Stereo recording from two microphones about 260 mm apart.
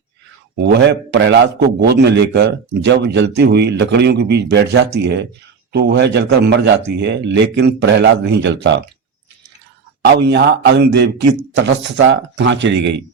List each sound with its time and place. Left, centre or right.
0.5 s a man's voice: right
10.0 s a man's voice: right